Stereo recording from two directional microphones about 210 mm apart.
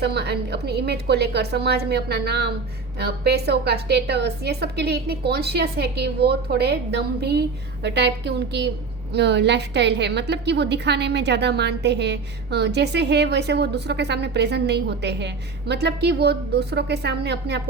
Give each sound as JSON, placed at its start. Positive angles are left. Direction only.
{"t": 0.0, "sound": "a woman's voice", "side_deg": -50}